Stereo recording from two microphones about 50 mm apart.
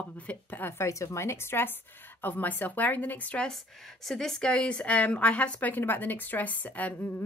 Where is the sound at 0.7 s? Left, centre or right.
Left.